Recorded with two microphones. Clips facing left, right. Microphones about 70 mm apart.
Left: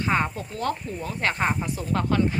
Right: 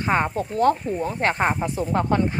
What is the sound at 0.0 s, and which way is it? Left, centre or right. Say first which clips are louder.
Speech: right 3 dB; right.